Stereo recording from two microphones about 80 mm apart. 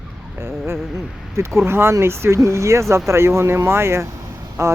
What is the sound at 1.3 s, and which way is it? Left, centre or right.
Speech, right.